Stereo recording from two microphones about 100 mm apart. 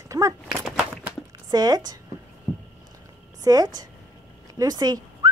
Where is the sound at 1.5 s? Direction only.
40° right (ahead or behind).